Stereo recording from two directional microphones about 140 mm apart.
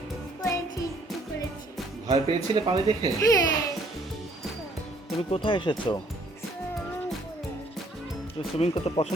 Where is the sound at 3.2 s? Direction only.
25° left (ahead or behind).